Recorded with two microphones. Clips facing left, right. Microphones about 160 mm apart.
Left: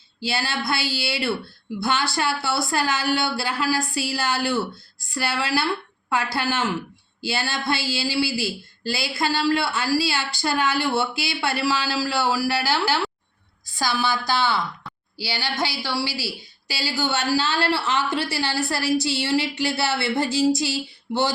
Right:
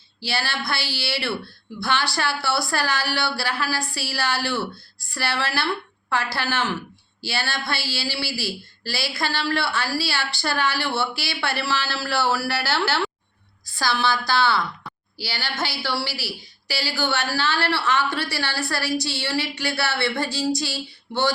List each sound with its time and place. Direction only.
0.2 s a woman's voice: 20° left (ahead or behind)